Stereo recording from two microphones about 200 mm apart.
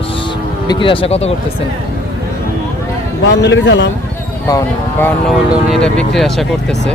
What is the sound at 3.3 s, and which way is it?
Speech, 60° left (ahead or behind).